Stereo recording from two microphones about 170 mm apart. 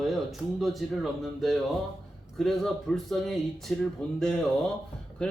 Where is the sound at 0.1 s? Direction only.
Centre (ahead or behind).